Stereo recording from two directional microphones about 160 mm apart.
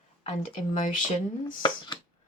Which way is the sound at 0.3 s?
50° left (ahead or behind).